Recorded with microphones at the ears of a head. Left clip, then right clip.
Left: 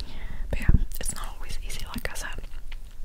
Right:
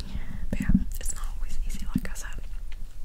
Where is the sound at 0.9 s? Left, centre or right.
Left.